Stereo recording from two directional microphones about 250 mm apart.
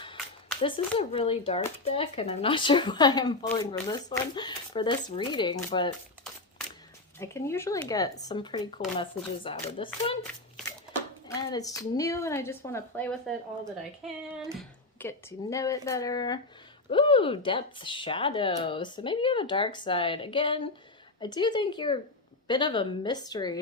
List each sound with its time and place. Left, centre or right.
0.6 s speech: left
7.2 s a woman's voice: centre
11.3 s a woman's voice: centre
14.9 s a woman's voice: centre